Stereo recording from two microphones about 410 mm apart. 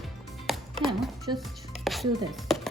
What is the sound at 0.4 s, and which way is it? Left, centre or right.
Music, centre.